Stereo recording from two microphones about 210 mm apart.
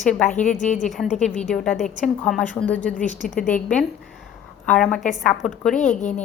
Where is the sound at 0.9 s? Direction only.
Centre (ahead or behind).